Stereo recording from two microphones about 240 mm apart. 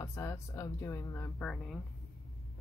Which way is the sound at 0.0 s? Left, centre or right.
Centre.